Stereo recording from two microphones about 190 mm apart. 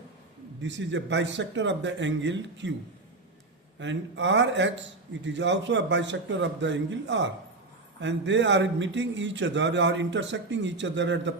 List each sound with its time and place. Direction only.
0.6 s a man's voice: 70° right (ahead or behind)
3.8 s a man's voice: 70° right (ahead or behind)